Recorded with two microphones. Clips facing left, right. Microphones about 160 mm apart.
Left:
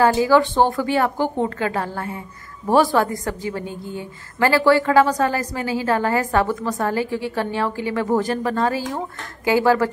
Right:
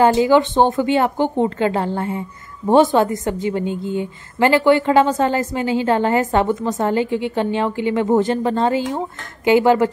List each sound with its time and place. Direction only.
0.0 s a woman's voice: 20° right (ahead or behind)